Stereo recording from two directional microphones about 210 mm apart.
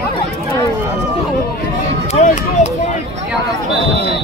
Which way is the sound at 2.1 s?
35° left (ahead or behind).